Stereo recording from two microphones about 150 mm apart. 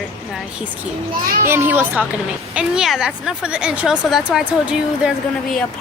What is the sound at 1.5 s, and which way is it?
A child's voice, 15° right (ahead or behind).